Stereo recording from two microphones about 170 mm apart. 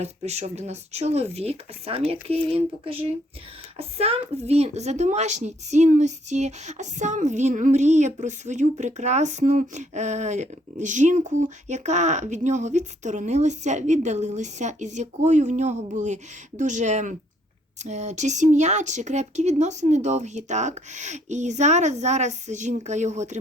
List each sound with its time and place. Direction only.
0.0 s speech: 40° right (ahead or behind)